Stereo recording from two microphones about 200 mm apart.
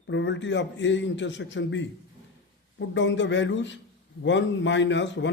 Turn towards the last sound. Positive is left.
turn(degrees=65)  # may be behind; listen again after turning